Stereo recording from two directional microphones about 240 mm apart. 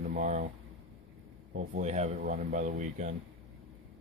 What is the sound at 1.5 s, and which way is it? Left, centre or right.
Speech, right.